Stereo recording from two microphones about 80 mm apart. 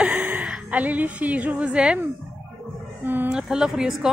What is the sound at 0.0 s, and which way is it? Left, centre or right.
A woman's voice, centre.